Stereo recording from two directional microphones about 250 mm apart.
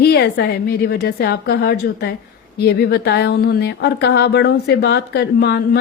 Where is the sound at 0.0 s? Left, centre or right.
Left.